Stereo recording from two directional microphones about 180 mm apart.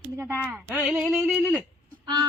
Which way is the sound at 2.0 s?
25° right (ahead or behind).